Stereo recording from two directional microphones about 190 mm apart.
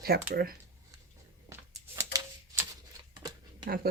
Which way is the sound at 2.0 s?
15° right (ahead or behind).